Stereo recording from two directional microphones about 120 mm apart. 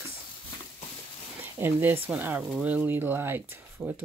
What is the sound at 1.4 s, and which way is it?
Speech, 15° right (ahead or behind).